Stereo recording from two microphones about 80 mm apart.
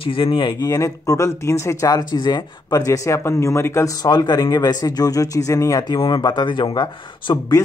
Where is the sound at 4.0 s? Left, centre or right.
Left.